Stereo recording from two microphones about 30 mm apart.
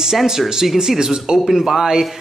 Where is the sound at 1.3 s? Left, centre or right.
Centre.